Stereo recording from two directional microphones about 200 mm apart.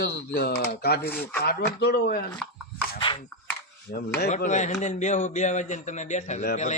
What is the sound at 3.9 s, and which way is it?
Speech, 55° left (ahead or behind).